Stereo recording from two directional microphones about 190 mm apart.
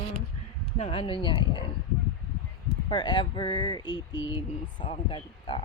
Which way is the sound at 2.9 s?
25° left (ahead or behind).